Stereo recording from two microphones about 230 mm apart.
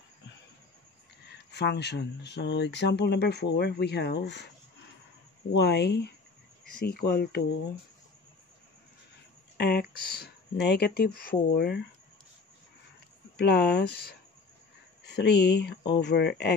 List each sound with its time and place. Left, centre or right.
1.5 s speech: left
5.5 s speech: left
9.6 s speech: left
13.4 s speech: left